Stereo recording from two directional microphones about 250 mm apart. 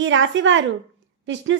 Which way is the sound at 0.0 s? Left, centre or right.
Right.